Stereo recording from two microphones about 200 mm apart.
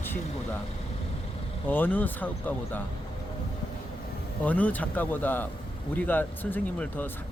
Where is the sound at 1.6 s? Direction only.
10° left (ahead or behind).